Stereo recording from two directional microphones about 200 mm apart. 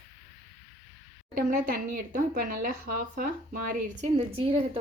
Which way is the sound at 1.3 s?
45° right (ahead or behind).